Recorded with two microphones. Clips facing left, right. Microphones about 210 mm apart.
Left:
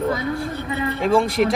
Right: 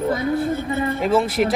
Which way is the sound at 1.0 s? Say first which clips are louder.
Left 2 dB; centre (ahead or behind).